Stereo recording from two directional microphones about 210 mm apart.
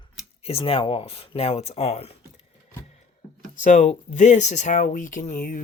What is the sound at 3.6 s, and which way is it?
Speech, 35° left (ahead or behind).